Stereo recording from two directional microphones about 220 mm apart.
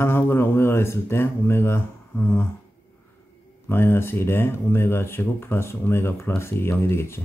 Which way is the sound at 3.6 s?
10° left (ahead or behind).